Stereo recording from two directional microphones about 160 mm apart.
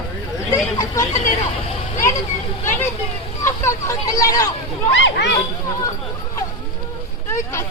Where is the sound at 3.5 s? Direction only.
20° left (ahead or behind).